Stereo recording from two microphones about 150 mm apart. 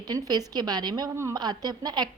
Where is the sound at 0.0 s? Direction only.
25° right (ahead or behind).